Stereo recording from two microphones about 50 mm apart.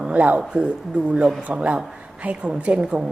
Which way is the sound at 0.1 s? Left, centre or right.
Right.